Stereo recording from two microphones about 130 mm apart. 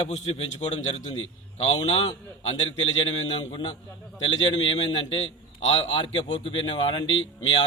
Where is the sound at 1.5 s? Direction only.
50° left (ahead or behind).